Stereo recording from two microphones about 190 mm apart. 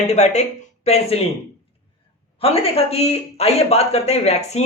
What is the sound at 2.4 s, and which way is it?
A man's voice, 30° left (ahead or behind).